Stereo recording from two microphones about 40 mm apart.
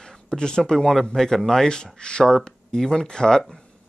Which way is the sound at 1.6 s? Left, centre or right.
Left.